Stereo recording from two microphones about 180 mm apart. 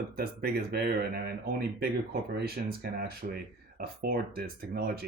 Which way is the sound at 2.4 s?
60° right (ahead or behind).